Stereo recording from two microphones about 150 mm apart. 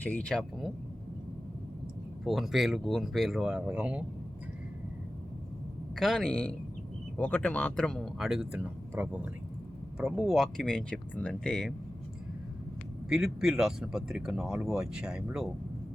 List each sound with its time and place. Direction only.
0.0 s speech: 10° left (ahead or behind)
2.2 s speech: centre (ahead or behind)
6.0 s speech: centre (ahead or behind)
13.1 s speech: centre (ahead or behind)